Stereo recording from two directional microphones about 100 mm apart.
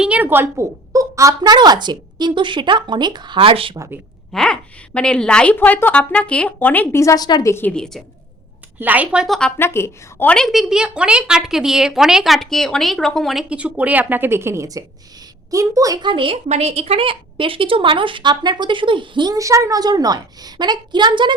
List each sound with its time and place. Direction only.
0.0 s speech: 15° right (ahead or behind)
0.9 s a woman's voice: 30° right (ahead or behind); by 3.8 s 65° right (ahead or behind)
4.3 s speech: 5° left (ahead or behind)
7.0 s a woman's voice: 35° left (ahead or behind)
7.7 s speech: 5° left (ahead or behind)
8.8 s a woman's voice: 15° right (ahead or behind)
9.2 s a woman's voice: centre (ahead or behind)
9.6 s a woman's voice: 25° left (ahead or behind)
10.2 s a woman's voice: 5° left (ahead or behind)
13.5 s a woman's voice: 10° right (ahead or behind); by 16.0 s 35° right (ahead or behind)
16.0 s a woman's voice: 55° right (ahead or behind)
19.4 s a woman's voice: 30° right (ahead or behind); by 21.3 s 50° right (ahead or behind)